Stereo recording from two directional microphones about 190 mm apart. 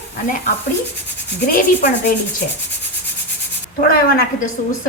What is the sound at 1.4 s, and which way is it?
Speech, 45° left (ahead or behind).